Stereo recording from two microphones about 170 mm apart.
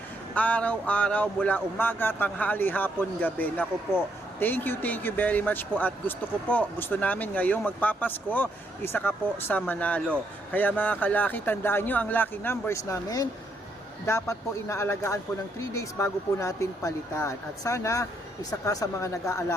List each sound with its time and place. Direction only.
0.3 s speech: 10° left (ahead or behind)